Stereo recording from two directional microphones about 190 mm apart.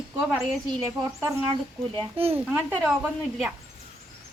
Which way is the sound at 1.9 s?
30° right (ahead or behind).